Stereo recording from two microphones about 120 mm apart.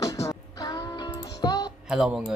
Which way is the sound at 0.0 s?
30° left (ahead or behind).